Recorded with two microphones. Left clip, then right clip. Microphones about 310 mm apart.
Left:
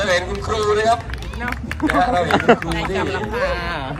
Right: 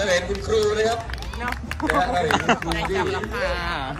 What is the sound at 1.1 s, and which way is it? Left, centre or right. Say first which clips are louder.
Speech: left 2 dB; right.